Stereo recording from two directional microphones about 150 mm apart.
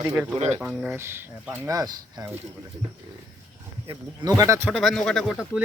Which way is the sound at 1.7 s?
25° right (ahead or behind).